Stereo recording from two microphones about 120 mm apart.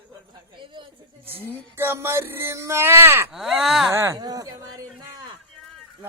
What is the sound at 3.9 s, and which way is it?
Speech, 25° right (ahead or behind).